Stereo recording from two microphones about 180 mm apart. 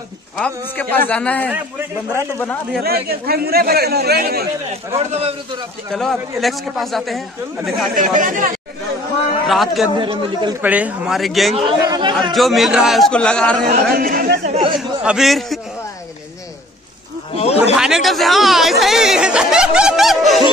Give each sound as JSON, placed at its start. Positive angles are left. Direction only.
{"t": 0.4, "sound": "a man's voice", "side_deg": 10}
{"t": 2.8, "sound": "a man's voice", "side_deg": -60}
{"t": 4.9, "sound": "a man's voice", "side_deg": -35}
{"t": 5.9, "sound": "speech", "side_deg": 0}
{"t": 7.9, "sound": "speech", "side_deg": -50}
{"t": 9.5, "sound": "speech", "side_deg": 0}
{"t": 9.9, "sound": "speech", "side_deg": -25}
{"t": 10.6, "sound": "speech", "side_deg": -10}
{"t": 11.8, "sound": "speech", "side_deg": -25}
{"t": 12.3, "sound": "speech", "side_deg": 0}
{"t": 13.9, "sound": "speech", "side_deg": -55}
{"t": 14.4, "sound": "chatter", "side_deg": -35}
{"t": 14.8, "sound": "a man's voice", "side_deg": 0}
{"t": 17.7, "sound": "speech", "side_deg": -5}